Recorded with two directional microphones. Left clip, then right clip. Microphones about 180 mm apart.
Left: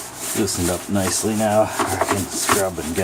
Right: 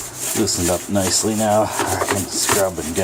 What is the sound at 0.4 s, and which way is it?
Speech, 5° left (ahead or behind).